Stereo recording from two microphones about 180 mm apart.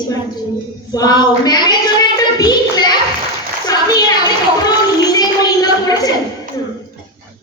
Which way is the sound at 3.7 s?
20° left (ahead or behind).